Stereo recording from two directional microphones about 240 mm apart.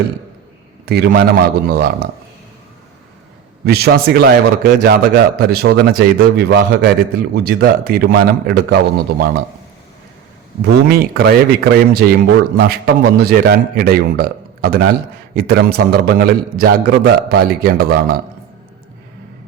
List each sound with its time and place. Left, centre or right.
0.9 s a man's voice: right
3.6 s a man's voice: right
10.7 s a man's voice: right